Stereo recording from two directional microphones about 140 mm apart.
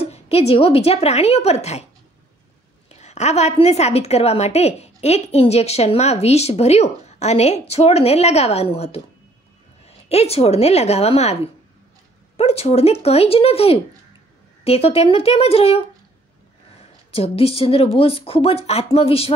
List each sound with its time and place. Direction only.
0.0 s a woman's voice: 50° left (ahead or behind)
2.9 s a woman's voice: 55° left (ahead or behind)
17.1 s a woman's voice: 45° left (ahead or behind)